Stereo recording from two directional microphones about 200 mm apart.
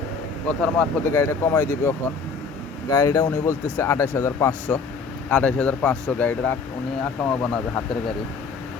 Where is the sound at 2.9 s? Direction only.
20° left (ahead or behind); by 7.3 s centre (ahead or behind).